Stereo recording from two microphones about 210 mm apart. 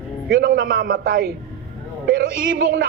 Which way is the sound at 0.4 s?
45° right (ahead or behind).